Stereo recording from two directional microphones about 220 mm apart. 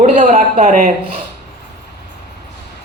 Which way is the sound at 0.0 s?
35° right (ahead or behind).